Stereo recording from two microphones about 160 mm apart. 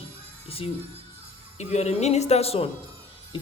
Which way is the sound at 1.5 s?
45° left (ahead or behind).